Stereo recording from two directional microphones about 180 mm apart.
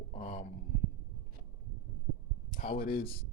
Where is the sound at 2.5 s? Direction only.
45° left (ahead or behind).